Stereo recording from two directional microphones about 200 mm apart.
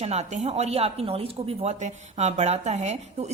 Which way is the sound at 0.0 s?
35° right (ahead or behind).